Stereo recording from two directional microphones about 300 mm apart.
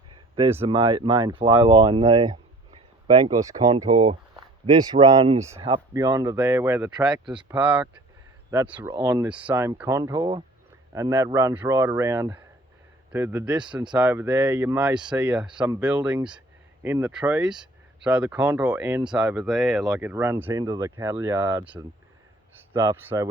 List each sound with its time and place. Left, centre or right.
0.6 s speech: centre